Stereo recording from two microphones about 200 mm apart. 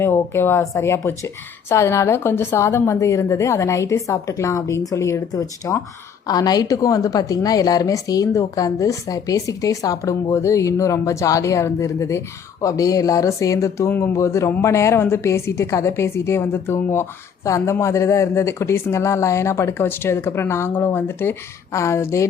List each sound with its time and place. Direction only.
0.0 s speech: 10° left (ahead or behind)